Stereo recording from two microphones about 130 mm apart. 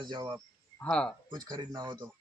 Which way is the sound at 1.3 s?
35° right (ahead or behind).